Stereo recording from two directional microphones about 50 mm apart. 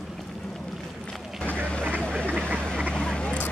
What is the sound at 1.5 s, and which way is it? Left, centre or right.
Vehicle, left.